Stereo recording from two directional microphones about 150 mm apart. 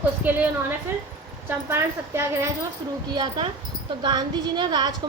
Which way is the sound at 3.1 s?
30° right (ahead or behind).